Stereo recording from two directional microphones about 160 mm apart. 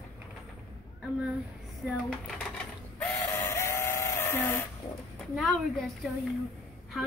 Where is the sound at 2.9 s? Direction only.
10° left (ahead or behind).